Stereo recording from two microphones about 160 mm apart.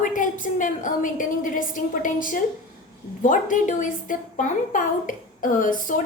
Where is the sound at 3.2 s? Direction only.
55° left (ahead or behind).